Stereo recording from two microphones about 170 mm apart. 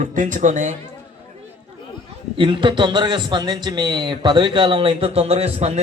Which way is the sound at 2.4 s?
30° right (ahead or behind).